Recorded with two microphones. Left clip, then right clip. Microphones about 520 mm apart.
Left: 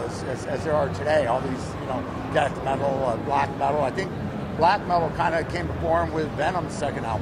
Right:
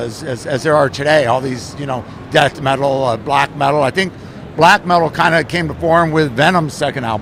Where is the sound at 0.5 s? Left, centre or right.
Right.